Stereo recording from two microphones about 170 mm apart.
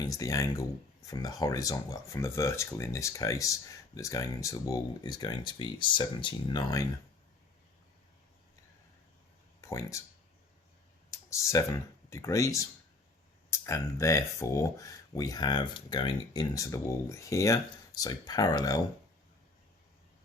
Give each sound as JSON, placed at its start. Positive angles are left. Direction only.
{"t": 0.0, "sound": "speech", "side_deg": 20}
{"t": 9.6, "sound": "speech", "side_deg": 15}
{"t": 11.1, "sound": "speech", "side_deg": 15}